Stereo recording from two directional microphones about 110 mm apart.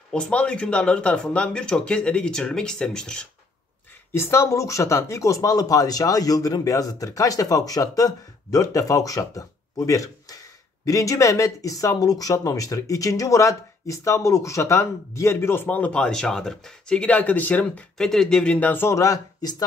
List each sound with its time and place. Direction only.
0.1 s speech: 10° left (ahead or behind)
4.1 s speech: 25° left (ahead or behind)